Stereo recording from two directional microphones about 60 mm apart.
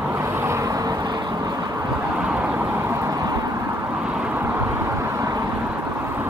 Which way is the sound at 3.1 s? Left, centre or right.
Right.